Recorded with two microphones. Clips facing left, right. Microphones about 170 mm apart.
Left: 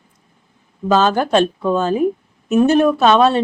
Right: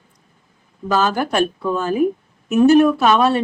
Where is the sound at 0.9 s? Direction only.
25° left (ahead or behind).